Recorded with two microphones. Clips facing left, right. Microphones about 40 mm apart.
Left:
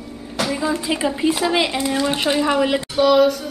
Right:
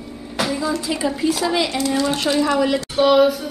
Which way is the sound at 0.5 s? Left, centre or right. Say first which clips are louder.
Left 1 dB; left.